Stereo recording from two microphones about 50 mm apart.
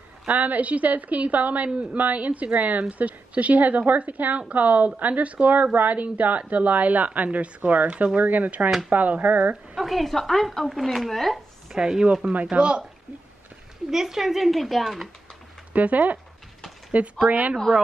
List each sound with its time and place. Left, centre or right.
0.3 s a woman's voice: right
8.6 s speech: centre
8.9 s a woman's voice: right
9.8 s speech: centre
11.7 s a woman's voice: centre
13.8 s speech: centre
15.7 s a woman's voice: right